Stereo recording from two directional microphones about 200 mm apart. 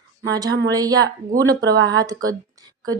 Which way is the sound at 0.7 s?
20° right (ahead or behind).